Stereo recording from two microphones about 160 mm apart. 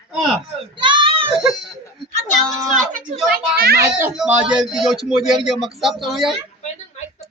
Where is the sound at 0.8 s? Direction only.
30° right (ahead or behind).